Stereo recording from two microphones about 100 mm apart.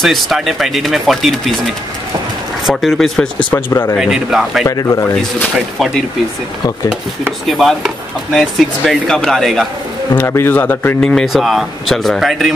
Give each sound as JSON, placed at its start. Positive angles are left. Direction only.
{"t": 0.0, "sound": "speech", "side_deg": 0}
{"t": 2.6, "sound": "speech", "side_deg": 0}
{"t": 3.5, "sound": "speech", "side_deg": 25}
{"t": 4.0, "sound": "speech", "side_deg": -5}
{"t": 7.4, "sound": "speech", "side_deg": 0}
{"t": 10.1, "sound": "speech", "side_deg": 25}
{"t": 11.0, "sound": "speech", "side_deg": 5}